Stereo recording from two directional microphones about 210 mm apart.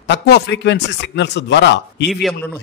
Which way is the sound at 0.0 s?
55° left (ahead or behind).